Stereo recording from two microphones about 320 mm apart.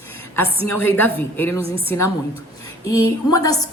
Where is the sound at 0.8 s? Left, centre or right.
Centre.